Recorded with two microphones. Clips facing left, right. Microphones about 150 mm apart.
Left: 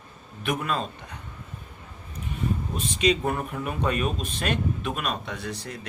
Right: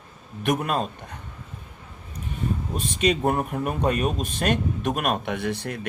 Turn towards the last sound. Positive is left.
turn(degrees=-60)  # may be behind; listen again after turning